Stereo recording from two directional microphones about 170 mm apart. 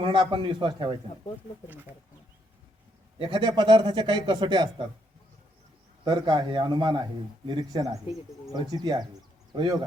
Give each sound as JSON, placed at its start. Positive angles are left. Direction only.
{"t": 0.0, "sound": "a man's voice", "side_deg": -30}
{"t": 3.2, "sound": "a man's voice", "side_deg": -30}
{"t": 6.1, "sound": "a man's voice", "side_deg": -25}